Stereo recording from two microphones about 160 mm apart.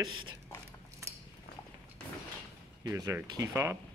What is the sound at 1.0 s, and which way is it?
Cutlery, 20° right (ahead or behind).